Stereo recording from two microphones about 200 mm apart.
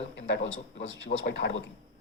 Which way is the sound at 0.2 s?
65° left (ahead or behind).